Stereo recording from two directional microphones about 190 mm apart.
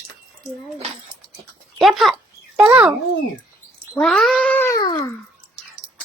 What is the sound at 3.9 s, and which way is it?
Speech, 5° left (ahead or behind).